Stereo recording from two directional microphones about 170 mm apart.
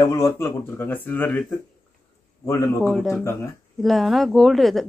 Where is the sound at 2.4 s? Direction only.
15° left (ahead or behind).